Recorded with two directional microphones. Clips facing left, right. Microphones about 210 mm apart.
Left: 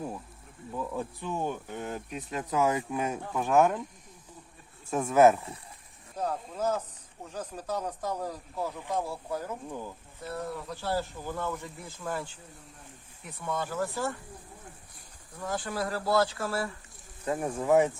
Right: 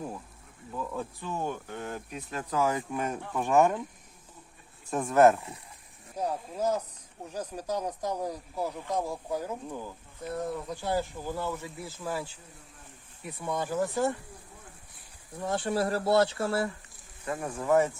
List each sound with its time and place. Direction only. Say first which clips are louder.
0.7 s speech: left 1 dB; 10° left (ahead or behind)
2.9 s speech: left 1 dB; 5° left (ahead or behind)
4.9 s speech: even; 5° left (ahead or behind)
6.1 s speech: right 1 dB; 10° right (ahead or behind)
9.6 s speech: even; centre (ahead or behind)
10.2 s speech: right 3 dB; 20° right (ahead or behind)
13.4 s speech: right 2 dB; 15° right (ahead or behind)
15.4 s speech: right 4 dB; 25° right (ahead or behind)
17.2 s speech: left 3 dB; 25° left (ahead or behind)
17.6 s speech: left 1 dB; 5° left (ahead or behind)